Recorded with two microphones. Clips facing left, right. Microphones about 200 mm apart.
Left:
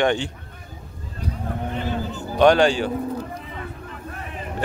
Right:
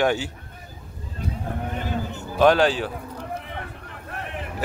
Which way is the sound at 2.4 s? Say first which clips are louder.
Left 2 dB; 5° right (ahead or behind).